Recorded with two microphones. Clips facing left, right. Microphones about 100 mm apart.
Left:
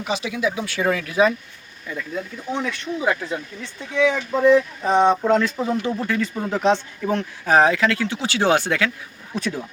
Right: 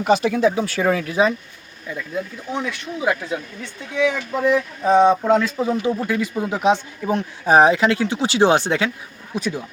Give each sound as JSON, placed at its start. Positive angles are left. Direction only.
{"t": 0.0, "sound": "speech", "side_deg": -50}
{"t": 1.9, "sound": "speech", "side_deg": -10}
{"t": 9.3, "sound": "speech", "side_deg": -5}